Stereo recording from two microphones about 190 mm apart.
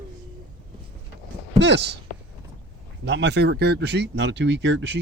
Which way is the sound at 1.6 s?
65° right (ahead or behind).